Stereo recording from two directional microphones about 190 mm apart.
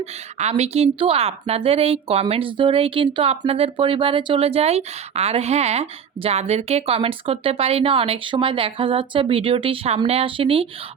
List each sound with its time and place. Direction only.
0.0 s a woman's voice: 35° right (ahead or behind)